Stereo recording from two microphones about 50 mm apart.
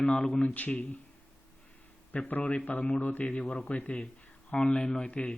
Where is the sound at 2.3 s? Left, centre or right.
Left.